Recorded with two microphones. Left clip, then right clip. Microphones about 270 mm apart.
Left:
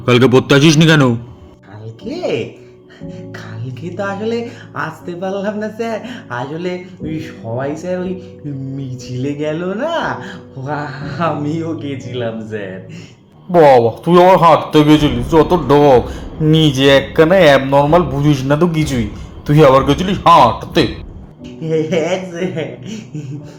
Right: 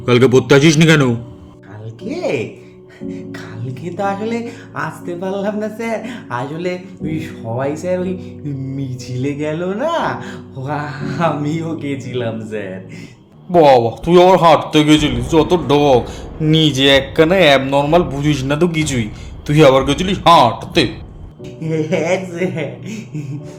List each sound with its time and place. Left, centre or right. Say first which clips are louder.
0.0 s a man's voice: left 1 dB; centre
2.0 s speech: even; centre
13.5 s a man's voice: left 2 dB; centre
21.6 s speech: left 2 dB; centre